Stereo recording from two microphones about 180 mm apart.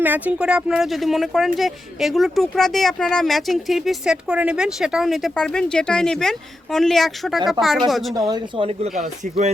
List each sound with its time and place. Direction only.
0.0 s speech: 10° right (ahead or behind)
8.3 s speech: 25° right (ahead or behind)